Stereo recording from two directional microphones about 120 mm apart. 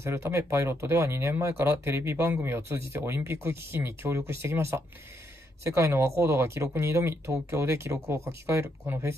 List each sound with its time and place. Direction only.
0.0 s speech: 20° right (ahead or behind)